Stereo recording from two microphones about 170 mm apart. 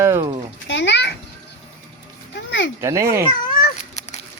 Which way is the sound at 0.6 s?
90° left.